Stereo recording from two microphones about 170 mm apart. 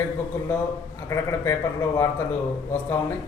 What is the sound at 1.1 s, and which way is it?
A man's voice, 15° left (ahead or behind).